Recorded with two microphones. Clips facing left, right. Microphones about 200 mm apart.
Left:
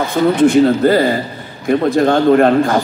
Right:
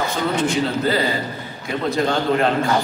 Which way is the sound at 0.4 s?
55° left (ahead or behind).